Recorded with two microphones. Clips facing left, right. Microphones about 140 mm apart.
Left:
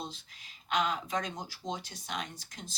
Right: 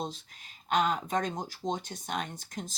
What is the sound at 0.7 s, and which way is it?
Speech, 45° right (ahead or behind).